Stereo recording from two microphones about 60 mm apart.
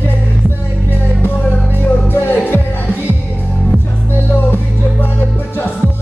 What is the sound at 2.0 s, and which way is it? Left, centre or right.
Music, left.